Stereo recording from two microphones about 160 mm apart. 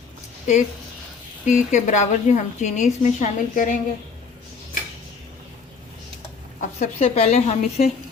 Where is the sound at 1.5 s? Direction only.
50° left (ahead or behind).